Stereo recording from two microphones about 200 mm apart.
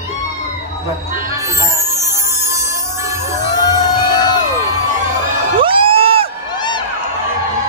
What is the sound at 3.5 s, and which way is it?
Music, 20° left (ahead or behind).